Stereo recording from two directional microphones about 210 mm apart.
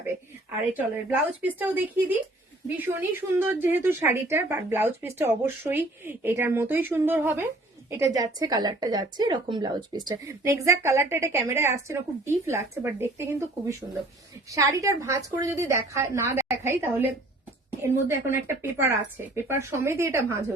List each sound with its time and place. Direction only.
1.4 s speech: 10° right (ahead or behind)